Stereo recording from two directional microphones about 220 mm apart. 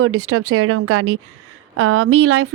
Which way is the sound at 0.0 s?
70° right (ahead or behind).